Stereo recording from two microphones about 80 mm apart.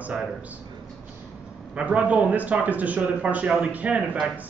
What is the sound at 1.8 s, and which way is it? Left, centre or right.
A man's voice, centre.